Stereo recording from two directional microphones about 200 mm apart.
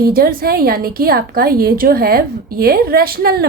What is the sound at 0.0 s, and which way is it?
A woman's voice, 50° right (ahead or behind).